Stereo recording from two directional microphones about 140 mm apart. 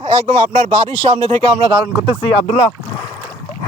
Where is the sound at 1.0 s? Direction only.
45° right (ahead or behind).